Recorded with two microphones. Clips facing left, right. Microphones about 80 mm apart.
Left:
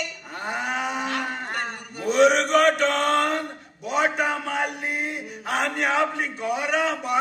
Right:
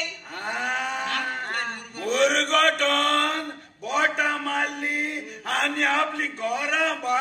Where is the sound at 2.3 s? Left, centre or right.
Left.